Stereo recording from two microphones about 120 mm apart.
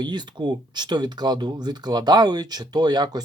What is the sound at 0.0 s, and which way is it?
Speech, 35° right (ahead or behind).